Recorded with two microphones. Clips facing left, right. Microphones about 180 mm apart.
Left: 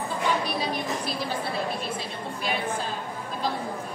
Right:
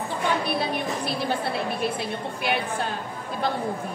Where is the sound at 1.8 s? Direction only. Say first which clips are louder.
Right 5 dB; 65° right (ahead or behind).